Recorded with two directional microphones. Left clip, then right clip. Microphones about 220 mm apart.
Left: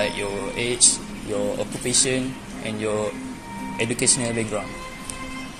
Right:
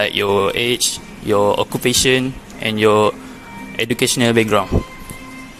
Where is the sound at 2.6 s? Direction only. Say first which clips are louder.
Right 12 dB; 50° right (ahead or behind).